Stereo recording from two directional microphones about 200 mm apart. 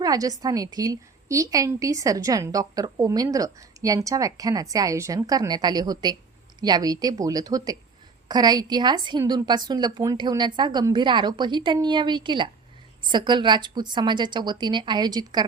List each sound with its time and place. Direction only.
0.0 s a woman's voice: 20° right (ahead or behind)